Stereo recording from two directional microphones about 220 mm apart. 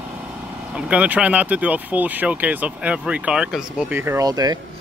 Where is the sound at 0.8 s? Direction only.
5° right (ahead or behind).